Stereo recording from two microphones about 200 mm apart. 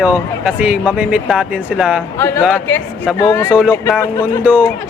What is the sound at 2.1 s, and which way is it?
A man's voice, 10° left (ahead or behind).